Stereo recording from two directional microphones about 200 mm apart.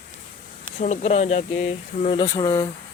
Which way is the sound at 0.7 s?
35° left (ahead or behind).